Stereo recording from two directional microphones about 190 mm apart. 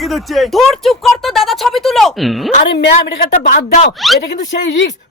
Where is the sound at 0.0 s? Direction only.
Centre (ahead or behind).